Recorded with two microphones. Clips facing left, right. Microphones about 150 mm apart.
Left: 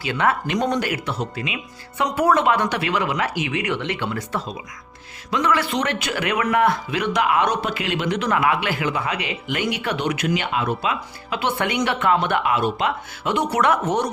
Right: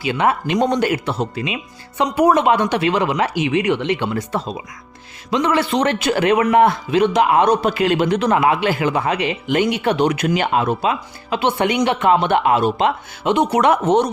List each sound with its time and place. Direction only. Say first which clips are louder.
0.0 s a man's voice: right 3 dB; 15° right (ahead or behind); by 12.9 s 35° right (ahead or behind)
13.2 s speech: right 5 dB; 20° right (ahead or behind)